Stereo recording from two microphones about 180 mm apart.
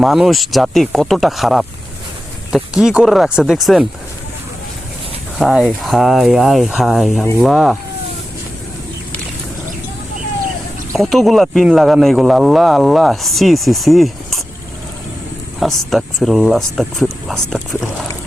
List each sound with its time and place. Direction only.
0.0 s speech: centre (ahead or behind)
5.4 s speech: centre (ahead or behind)
10.9 s speech: centre (ahead or behind)
15.6 s speech: centre (ahead or behind)